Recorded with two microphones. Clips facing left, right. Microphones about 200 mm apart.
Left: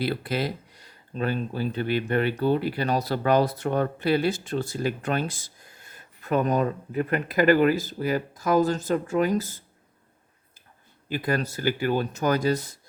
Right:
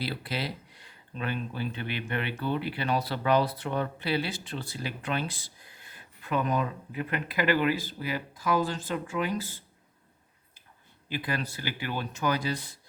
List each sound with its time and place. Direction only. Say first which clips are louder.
0.0 s speech: left 7 dB; 50° left (ahead or behind)
11.1 s speech: left 6 dB; 45° left (ahead or behind)